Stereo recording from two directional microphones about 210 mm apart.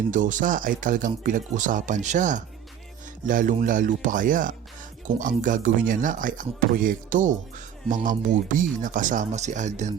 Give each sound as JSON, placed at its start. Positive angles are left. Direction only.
{"t": 0.1, "sound": "speech", "side_deg": -40}